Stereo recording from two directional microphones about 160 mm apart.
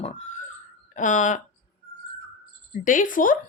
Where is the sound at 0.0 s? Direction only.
45° left (ahead or behind).